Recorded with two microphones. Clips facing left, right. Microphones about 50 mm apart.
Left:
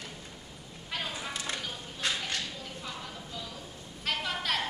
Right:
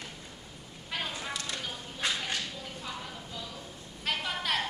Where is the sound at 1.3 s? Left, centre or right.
Left.